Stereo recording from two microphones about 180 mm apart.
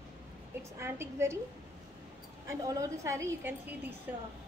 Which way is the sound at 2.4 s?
15° right (ahead or behind).